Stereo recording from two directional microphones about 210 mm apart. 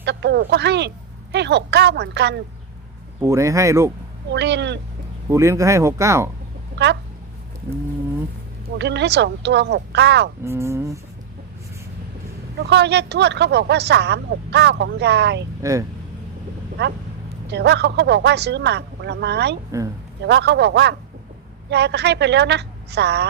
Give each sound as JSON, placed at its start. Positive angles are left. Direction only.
{"t": 0.0, "sound": "speech", "side_deg": -55}
{"t": 3.2, "sound": "speech", "side_deg": -15}
{"t": 4.3, "sound": "speech", "side_deg": -55}
{"t": 5.3, "sound": "speech", "side_deg": -15}
{"t": 8.8, "sound": "speech", "side_deg": -55}
{"t": 10.4, "sound": "speech", "side_deg": -10}
{"t": 12.6, "sound": "speech", "side_deg": -55}
{"t": 15.6, "sound": "speech", "side_deg": -15}
{"t": 17.5, "sound": "speech", "side_deg": -55}